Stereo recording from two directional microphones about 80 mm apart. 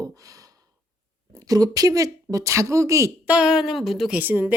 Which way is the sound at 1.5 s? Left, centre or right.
Right.